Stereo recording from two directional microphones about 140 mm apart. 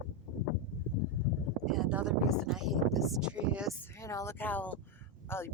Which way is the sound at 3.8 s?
20° left (ahead or behind).